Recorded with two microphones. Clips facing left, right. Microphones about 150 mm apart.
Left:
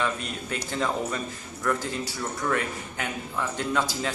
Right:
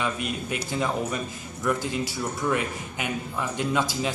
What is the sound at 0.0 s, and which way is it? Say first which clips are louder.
A man's voice: right 1 dB; 15° right (ahead or behind).